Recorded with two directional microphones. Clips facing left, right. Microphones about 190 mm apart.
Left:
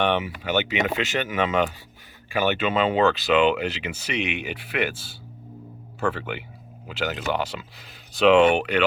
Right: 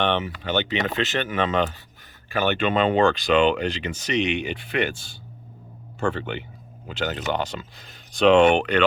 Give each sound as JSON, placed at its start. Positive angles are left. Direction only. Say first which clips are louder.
{"t": 0.0, "sound": "speech", "louder": "even", "side_deg": 10}